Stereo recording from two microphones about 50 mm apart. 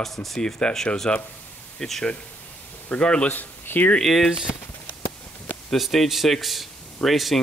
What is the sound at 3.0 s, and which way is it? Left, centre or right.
Speech, left.